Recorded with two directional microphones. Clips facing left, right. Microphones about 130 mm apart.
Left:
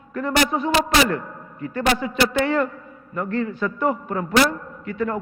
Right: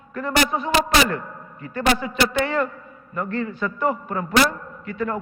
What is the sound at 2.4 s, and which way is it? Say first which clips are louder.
A man's voice: left 2 dB; 20° left (ahead or behind).